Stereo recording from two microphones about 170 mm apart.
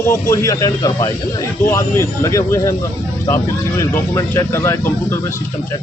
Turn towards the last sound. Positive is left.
turn(degrees=15)  # may be behind; listen again after turning